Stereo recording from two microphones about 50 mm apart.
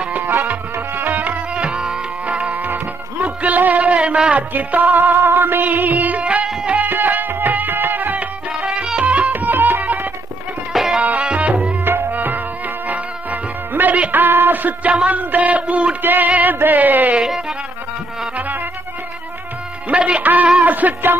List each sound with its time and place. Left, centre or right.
0.2 s music: right
1.5 s music: right
5.1 s music: right
6.8 s music: right
8.5 s music: centre
9.0 s music: right
10.7 s music: centre
11.0 s music: right
11.8 s tabla: right
12.8 s music: right
15.0 s a sound: right
16.0 s music: right
19.9 s a sound: right
20.4 s music: right